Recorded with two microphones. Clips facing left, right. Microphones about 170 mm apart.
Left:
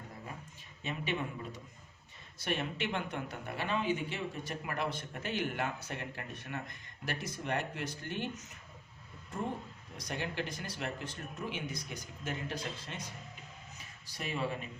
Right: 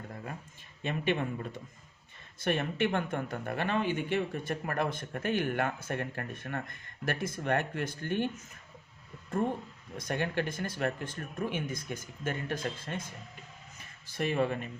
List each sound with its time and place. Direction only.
0.8 s speech: 55° right (ahead or behind)
2.4 s speech: 50° right (ahead or behind)
10.0 s speech: 55° right (ahead or behind)
14.2 s speech: 55° right (ahead or behind)